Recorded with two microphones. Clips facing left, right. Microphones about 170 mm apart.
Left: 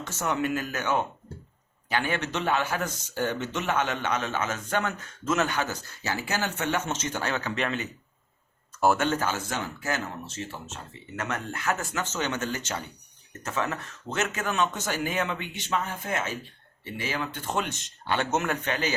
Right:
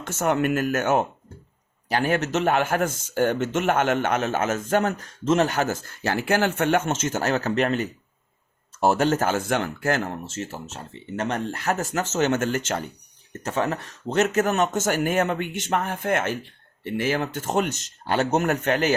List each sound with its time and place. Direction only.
0.0 s speech: 50° right (ahead or behind); by 5.5 s 30° right (ahead or behind)
5.5 s speech: 45° right (ahead or behind)
8.8 s speech: 35° right (ahead or behind); by 10.2 s 55° right (ahead or behind)
10.3 s speech: 45° right (ahead or behind)
11.2 s speech: 30° right (ahead or behind); by 12.8 s 50° right (ahead or behind)
13.4 s speech: 35° right (ahead or behind)